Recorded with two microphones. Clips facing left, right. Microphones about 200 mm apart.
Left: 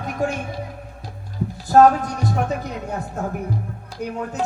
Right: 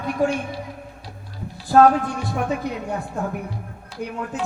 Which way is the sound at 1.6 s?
40° left (ahead or behind).